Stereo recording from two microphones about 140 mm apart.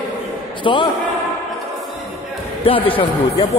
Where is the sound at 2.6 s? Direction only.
40° left (ahead or behind).